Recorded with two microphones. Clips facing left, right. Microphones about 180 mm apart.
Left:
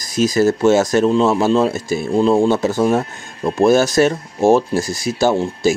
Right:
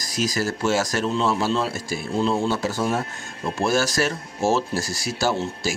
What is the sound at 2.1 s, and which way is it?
Speech, 55° left (ahead or behind).